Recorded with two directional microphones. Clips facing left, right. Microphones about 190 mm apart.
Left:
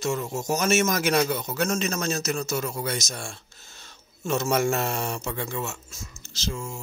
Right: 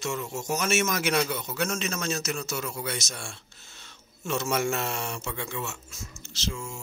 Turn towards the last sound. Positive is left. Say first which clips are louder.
# left 2 dB
turn(degrees=35)  # may be behind; listen again after turning